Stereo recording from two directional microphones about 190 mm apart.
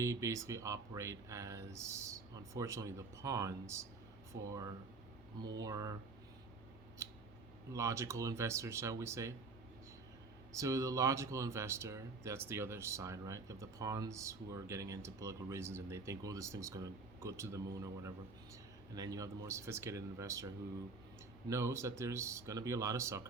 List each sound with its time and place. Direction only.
0.0 s speech: 15° right (ahead or behind)
7.7 s speech: 15° right (ahead or behind)
10.5 s speech: 15° right (ahead or behind)
21.5 s speech: 15° right (ahead or behind)